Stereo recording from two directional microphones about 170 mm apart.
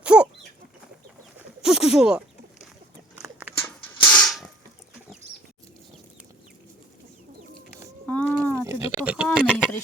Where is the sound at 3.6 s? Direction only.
10° left (ahead or behind).